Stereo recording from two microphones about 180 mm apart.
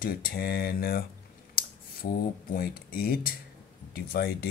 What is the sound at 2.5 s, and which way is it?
Speech, 55° left (ahead or behind).